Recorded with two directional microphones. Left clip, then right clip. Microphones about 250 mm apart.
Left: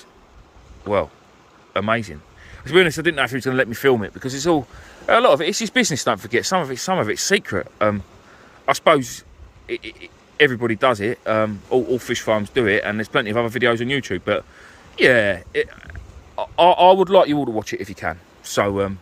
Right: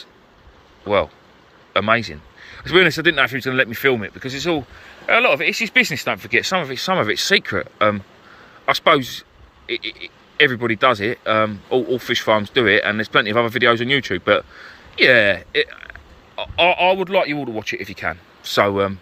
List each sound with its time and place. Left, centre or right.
0.9 s speech: centre
16.3 s speech: left